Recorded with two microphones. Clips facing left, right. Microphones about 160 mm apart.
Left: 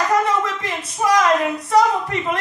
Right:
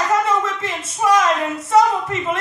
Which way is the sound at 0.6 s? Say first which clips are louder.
Even; 25° right (ahead or behind).